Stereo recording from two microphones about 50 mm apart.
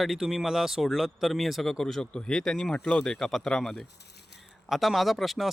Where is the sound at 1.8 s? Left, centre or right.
Centre.